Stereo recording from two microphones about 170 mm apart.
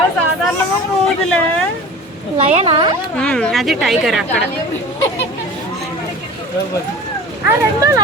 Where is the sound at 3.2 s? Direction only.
5° left (ahead or behind).